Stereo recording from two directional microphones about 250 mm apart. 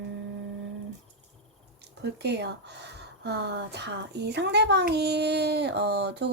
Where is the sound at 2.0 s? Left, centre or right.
Right.